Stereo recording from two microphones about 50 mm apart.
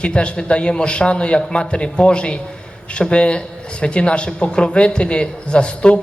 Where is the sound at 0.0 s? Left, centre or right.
Left.